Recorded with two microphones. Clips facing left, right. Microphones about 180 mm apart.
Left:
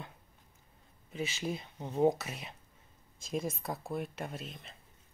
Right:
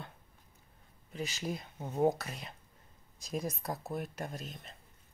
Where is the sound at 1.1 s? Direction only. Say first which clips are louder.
Left 2 dB; centre (ahead or behind).